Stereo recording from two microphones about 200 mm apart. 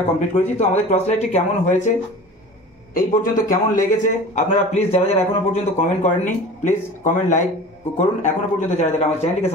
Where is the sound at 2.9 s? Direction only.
45° left (ahead or behind).